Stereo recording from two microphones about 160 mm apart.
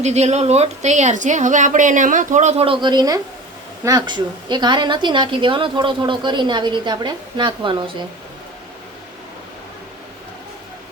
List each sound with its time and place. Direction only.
0.0 s a woman's voice: 45° right (ahead or behind)